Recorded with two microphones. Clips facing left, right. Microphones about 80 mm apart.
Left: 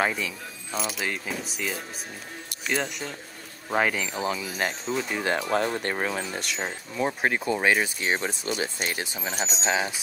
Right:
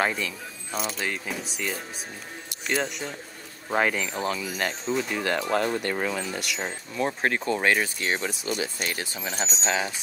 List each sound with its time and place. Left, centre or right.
0.0 s speech: centre
5.8 s speech: left
6.6 s speech: centre
8.5 s speech: left
8.9 s speech: left
9.3 s speech: centre